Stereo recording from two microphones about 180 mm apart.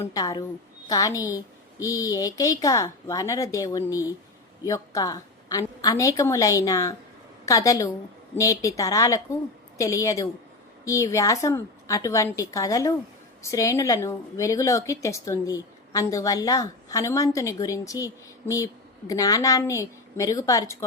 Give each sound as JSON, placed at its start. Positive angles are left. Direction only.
{"t": 0.0, "sound": "a woman's voice", "side_deg": 20}